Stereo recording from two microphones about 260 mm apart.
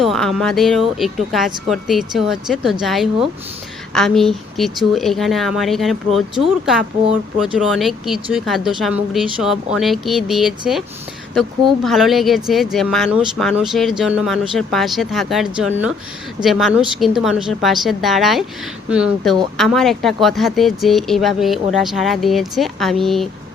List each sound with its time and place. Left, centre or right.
0.0 s speech: centre
7.3 s speech: centre